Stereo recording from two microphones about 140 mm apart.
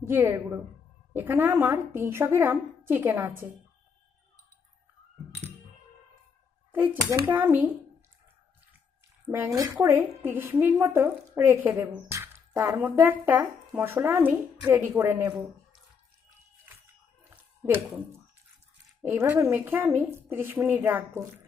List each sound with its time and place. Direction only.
0.0 s a woman's voice: 15° right (ahead or behind)
6.7 s a child's voice: 15° right (ahead or behind)
9.2 s a woman's voice: 15° right (ahead or behind)
19.0 s a woman's voice: 15° right (ahead or behind)